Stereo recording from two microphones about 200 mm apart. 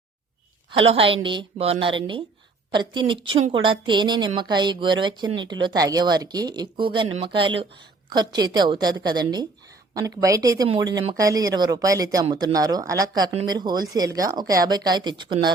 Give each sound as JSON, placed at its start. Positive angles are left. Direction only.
{"t": 0.7, "sound": "a woman's voice", "side_deg": -25}